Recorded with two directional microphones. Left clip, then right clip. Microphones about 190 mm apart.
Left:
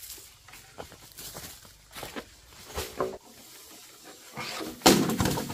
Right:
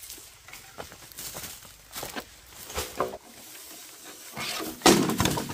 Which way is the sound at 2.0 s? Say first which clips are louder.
Right 3 dB; 40° right (ahead or behind).